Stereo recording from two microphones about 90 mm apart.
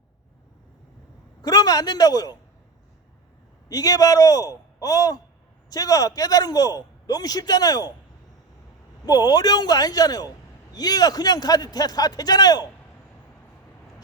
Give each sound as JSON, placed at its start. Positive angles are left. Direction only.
{"t": 1.4, "sound": "a man's voice", "side_deg": 45}
{"t": 3.7, "sound": "speech", "side_deg": 45}
{"t": 9.0, "sound": "speech", "side_deg": 45}